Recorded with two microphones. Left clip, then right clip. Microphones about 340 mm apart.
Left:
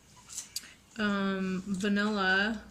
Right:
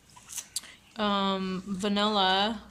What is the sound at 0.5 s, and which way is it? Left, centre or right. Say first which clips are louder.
A woman's voice: right 3 dB; centre.